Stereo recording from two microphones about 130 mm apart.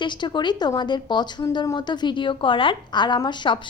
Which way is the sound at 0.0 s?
35° left (ahead or behind).